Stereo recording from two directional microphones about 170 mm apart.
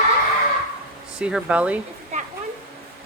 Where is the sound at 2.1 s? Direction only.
40° right (ahead or behind).